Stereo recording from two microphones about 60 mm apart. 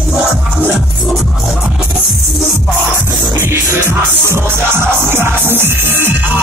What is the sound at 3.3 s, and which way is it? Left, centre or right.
Music, right.